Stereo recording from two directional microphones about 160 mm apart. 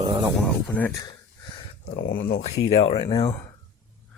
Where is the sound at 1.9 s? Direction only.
75° left (ahead or behind).